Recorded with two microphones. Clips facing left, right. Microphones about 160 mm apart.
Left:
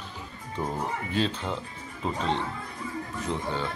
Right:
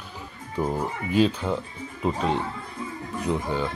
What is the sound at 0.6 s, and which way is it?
Speech, 10° right (ahead or behind).